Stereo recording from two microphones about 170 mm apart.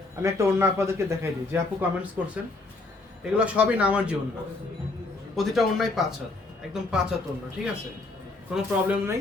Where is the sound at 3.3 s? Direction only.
5° right (ahead or behind).